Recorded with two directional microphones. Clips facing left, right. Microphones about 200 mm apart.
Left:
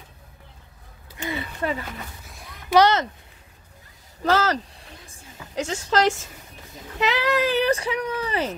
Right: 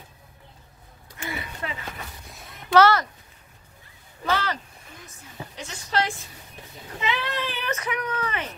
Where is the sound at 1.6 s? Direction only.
40° left (ahead or behind).